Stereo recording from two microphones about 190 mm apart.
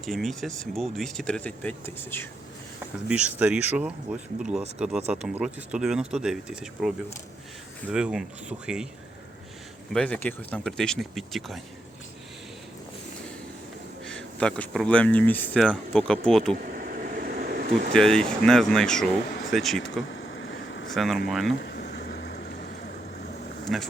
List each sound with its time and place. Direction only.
0.0 s speech: centre (ahead or behind)
3.1 s speech: 5° right (ahead or behind)
9.9 s speech: 5° left (ahead or behind)
14.0 s speech: 5° left (ahead or behind)
16.7 s vehicle: 50° right (ahead or behind)
17.9 s speech: 5° left (ahead or behind)
20.5 s vehicle: 70° left (ahead or behind)
20.9 s speech: centre (ahead or behind)
21.6 s a sound: 65° left (ahead or behind)
23.7 s speech: centre (ahead or behind)